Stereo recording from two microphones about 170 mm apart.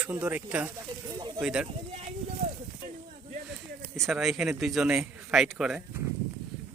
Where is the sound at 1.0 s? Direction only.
25° right (ahead or behind).